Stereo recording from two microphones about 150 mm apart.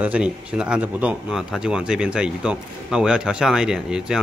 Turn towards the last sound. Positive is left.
turn(degrees=-5)  # may be behind; listen again after turning